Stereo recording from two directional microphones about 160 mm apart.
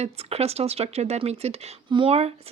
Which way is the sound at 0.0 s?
40° right (ahead or behind).